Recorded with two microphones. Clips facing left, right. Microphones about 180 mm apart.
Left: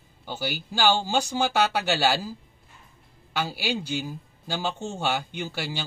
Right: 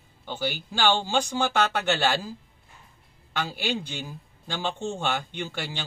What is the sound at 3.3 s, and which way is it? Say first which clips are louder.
Speech: left 1 dB; 10° left (ahead or behind).